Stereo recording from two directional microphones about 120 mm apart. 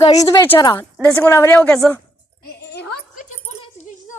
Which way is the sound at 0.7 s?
20° left (ahead or behind).